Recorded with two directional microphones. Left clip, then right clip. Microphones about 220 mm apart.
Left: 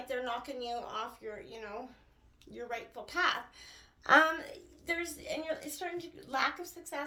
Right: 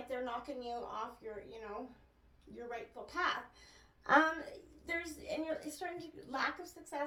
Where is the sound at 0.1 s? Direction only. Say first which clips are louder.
Left 4 dB; 35° left (ahead or behind).